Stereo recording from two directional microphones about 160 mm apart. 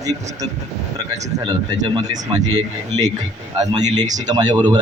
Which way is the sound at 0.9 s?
25° right (ahead or behind).